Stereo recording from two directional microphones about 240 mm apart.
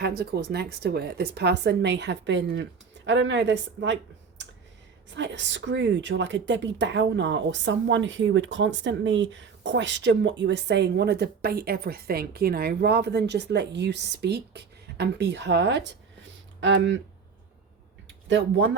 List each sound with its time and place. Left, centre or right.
0.0 s a woman's voice: right
5.1 s a woman's voice: right
18.3 s a woman's voice: right